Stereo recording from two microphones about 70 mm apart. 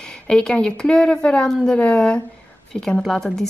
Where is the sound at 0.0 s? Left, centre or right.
Centre.